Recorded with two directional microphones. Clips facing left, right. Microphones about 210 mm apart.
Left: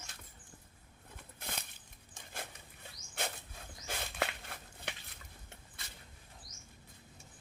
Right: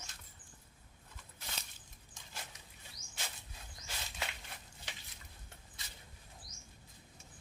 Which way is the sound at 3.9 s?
55° left (ahead or behind).